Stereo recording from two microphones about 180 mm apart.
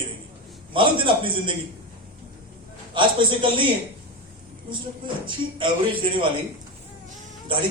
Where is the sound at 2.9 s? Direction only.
25° right (ahead or behind).